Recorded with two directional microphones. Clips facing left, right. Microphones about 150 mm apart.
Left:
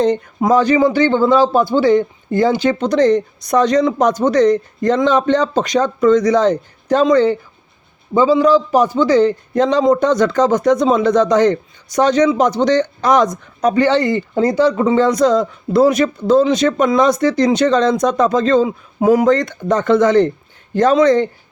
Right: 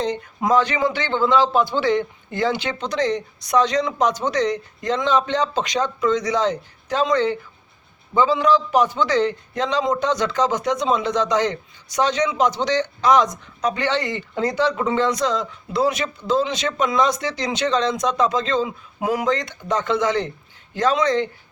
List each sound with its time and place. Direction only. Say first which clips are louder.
0.3 s a man's voice: left 5 dB; 35° left (ahead or behind)
9.6 s speech: left 9 dB; 45° left (ahead or behind)